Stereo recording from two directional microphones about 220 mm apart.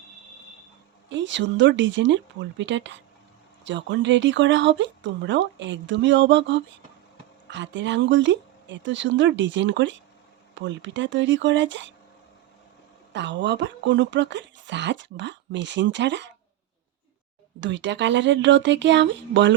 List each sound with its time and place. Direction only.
1.1 s speech: 55° right (ahead or behind)
13.1 s speech: 55° right (ahead or behind)
17.6 s speech: 55° right (ahead or behind)